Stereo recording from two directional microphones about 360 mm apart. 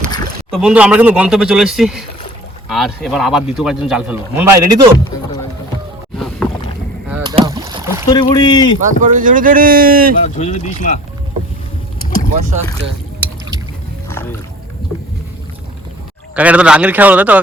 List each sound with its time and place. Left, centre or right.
0.5 s speech: centre
6.1 s rowboat: centre
8.1 s speech: centre
8.8 s speech: right
10.3 s speech: centre
12.3 s speech: centre
16.3 s speech: centre